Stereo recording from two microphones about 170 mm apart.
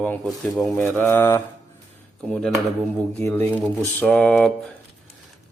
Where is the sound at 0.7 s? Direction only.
10° left (ahead or behind).